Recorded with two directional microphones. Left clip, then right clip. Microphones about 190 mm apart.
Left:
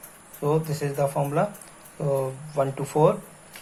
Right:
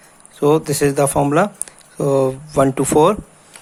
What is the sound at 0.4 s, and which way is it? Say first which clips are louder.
Speech: right 11 dB; 55° right (ahead or behind).